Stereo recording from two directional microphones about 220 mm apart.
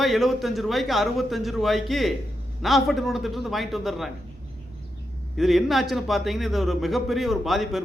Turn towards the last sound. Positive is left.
turn(degrees=0)  # may be behind; listen again after turning